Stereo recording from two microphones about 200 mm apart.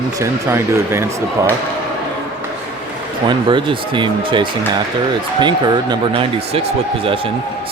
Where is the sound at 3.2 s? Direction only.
25° right (ahead or behind).